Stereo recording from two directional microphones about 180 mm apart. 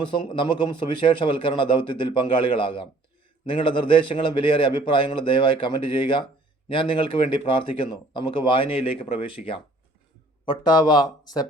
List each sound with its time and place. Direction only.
0.0 s a man's voice: 25° left (ahead or behind)